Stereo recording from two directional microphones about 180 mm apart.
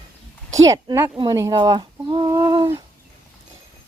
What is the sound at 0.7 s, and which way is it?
Speech, 20° right (ahead or behind).